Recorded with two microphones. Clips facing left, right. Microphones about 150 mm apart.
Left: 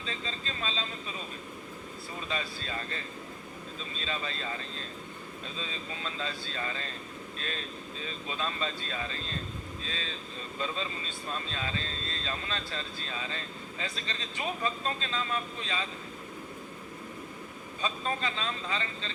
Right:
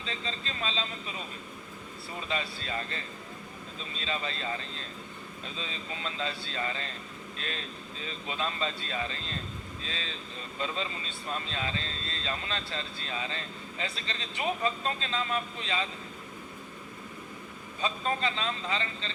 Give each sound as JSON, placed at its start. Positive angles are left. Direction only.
{"t": 0.1, "sound": "speech", "side_deg": -30}
{"t": 2.4, "sound": "speech", "side_deg": -30}
{"t": 4.0, "sound": "speech", "side_deg": -30}
{"t": 5.5, "sound": "speech", "side_deg": 40}
{"t": 6.1, "sound": "speech", "side_deg": -30}
{"t": 7.3, "sound": "speech", "side_deg": 35}
{"t": 8.3, "sound": "speech", "side_deg": -30}
{"t": 9.8, "sound": "speech", "side_deg": 35}
{"t": 11.5, "sound": "speech", "side_deg": -30}
{"t": 17.8, "sound": "speech", "side_deg": -30}